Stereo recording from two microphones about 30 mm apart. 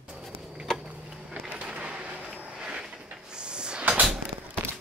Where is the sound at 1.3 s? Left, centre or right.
Right.